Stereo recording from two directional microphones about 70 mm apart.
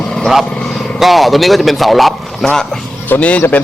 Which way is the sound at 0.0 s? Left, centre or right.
Centre.